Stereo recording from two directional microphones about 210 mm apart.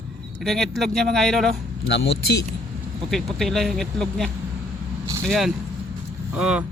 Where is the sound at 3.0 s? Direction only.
Centre (ahead or behind).